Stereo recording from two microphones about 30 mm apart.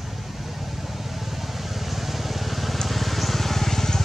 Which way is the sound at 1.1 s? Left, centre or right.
Centre.